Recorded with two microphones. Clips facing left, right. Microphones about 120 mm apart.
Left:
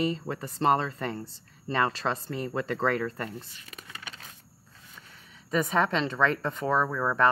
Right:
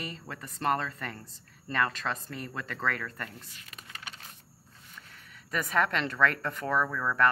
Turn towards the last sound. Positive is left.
turn(degrees=25)  # may be behind; listen again after turning